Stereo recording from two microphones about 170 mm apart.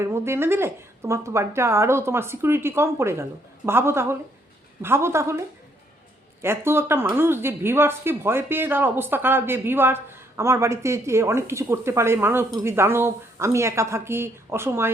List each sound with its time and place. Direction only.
0.0 s speech: 15° right (ahead or behind)